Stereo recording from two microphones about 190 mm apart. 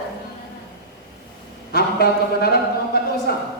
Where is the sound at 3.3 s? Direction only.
55° left (ahead or behind).